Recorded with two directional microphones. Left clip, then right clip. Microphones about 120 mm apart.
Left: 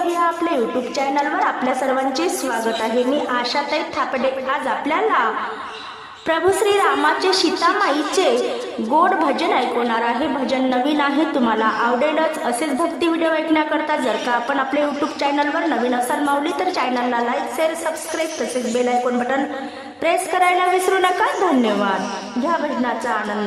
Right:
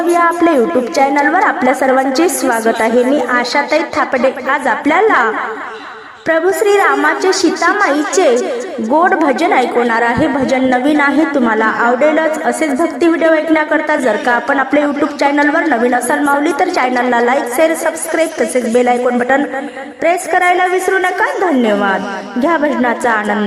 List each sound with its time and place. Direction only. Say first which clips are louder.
0.1 s a woman's voice: right 8 dB; 50° right (ahead or behind)
6.2 s a woman's voice: right 5 dB; 30° right (ahead or behind)
22.4 s a woman's voice: right 8 dB; 50° right (ahead or behind)